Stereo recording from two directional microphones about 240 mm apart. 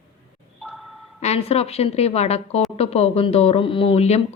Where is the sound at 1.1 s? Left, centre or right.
Left.